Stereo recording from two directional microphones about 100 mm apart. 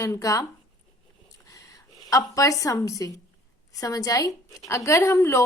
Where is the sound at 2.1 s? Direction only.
35° left (ahead or behind).